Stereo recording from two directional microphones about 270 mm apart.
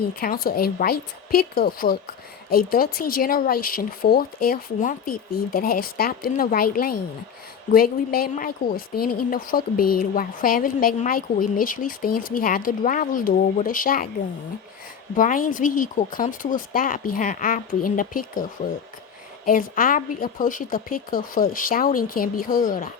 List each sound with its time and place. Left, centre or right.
0.2 s a woman's voice: left
15.1 s a woman's voice: left
18.6 s a woman's voice: left